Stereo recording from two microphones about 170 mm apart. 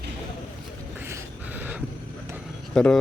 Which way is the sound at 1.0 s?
15° right (ahead or behind).